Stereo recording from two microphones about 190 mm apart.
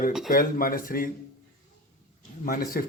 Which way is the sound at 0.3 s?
50° left (ahead or behind).